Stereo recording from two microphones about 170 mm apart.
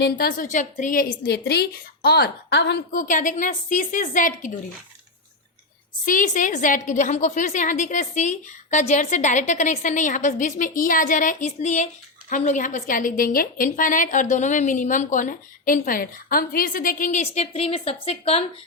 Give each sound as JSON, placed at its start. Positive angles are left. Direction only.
{"t": 0.0, "sound": "a woman's voice", "side_deg": 60}
{"t": 2.9, "sound": "a woman's voice", "side_deg": 50}
{"t": 6.1, "sound": "a woman's voice", "side_deg": 50}